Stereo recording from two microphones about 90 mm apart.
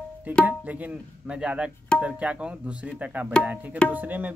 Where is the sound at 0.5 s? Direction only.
15° right (ahead or behind).